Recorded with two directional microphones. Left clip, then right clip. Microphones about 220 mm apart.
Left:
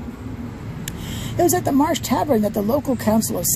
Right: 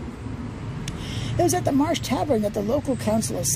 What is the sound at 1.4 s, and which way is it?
Speech, 25° left (ahead or behind).